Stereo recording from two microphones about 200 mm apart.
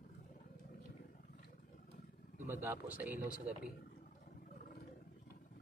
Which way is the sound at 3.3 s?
45° left (ahead or behind).